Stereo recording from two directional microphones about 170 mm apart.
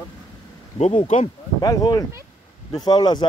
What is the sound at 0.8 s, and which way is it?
Speech, 35° left (ahead or behind).